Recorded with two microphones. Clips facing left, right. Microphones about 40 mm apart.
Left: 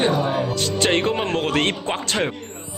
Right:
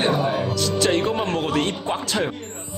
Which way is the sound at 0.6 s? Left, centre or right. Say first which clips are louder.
Even; left.